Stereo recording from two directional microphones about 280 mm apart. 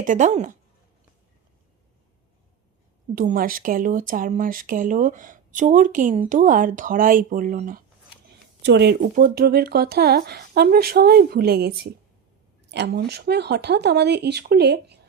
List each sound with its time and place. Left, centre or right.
0.0 s speech: right
3.2 s speech: right